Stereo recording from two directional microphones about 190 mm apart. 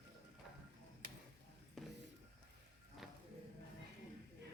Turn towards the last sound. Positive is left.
turn(degrees=0)  # may be behind; listen again after turning